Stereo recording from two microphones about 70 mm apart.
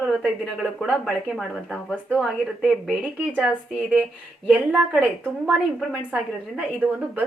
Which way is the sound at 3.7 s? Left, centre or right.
Centre.